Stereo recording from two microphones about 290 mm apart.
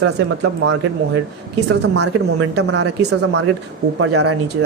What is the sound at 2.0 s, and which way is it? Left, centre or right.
Speech, right.